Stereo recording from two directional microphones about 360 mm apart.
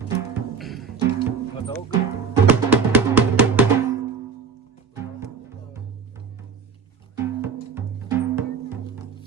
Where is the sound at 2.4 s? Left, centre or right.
Centre.